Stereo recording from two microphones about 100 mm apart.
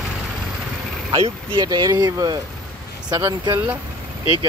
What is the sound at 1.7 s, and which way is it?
Speech, 40° right (ahead or behind).